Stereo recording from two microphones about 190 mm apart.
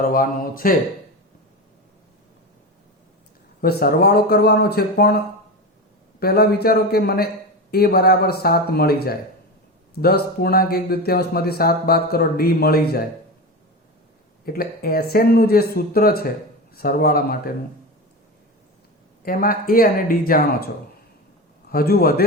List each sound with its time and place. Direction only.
0.1 s speech: 50° left (ahead or behind)
3.6 s speech: 55° left (ahead or behind)
14.4 s speech: 50° left (ahead or behind)
19.2 s speech: 50° left (ahead or behind)
21.7 s speech: 55° left (ahead or behind)